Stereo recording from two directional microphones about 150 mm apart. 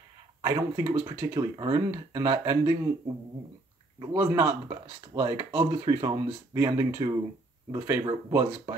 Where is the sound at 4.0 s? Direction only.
15° right (ahead or behind).